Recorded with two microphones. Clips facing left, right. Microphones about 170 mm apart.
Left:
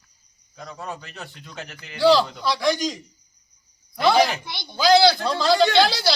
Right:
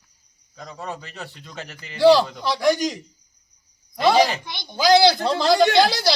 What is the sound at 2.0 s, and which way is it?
Speech, 15° right (ahead or behind).